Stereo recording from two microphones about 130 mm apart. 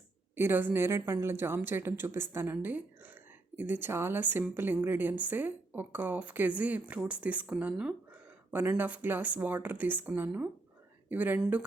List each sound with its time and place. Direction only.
0.3 s a woman's voice: 15° right (ahead or behind)